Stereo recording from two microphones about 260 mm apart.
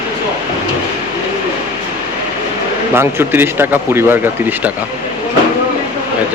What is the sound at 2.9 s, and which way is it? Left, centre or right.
A man's voice, centre.